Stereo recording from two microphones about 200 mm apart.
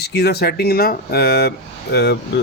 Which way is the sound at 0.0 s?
55° left (ahead or behind).